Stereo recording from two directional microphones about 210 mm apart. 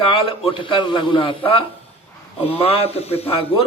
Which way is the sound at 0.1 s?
25° left (ahead or behind).